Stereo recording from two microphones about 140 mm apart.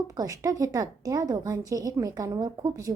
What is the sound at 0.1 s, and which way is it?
A woman's voice, 25° right (ahead or behind).